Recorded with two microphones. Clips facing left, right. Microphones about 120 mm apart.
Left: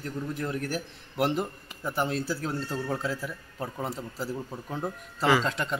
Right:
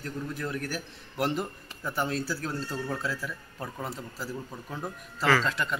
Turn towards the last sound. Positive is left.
turn(degrees=25)  # may be behind; listen again after turning